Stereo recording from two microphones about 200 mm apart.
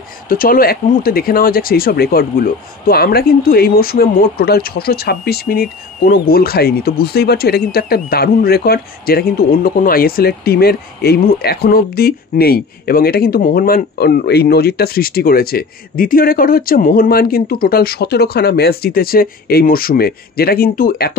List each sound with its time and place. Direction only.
0.3 s speech: 45° left (ahead or behind)